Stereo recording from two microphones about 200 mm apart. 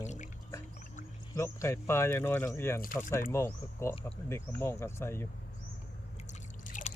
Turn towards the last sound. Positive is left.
turn(degrees=40)  # may be behind; listen again after turning